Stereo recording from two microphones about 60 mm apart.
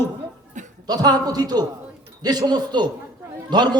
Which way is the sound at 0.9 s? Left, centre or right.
Right.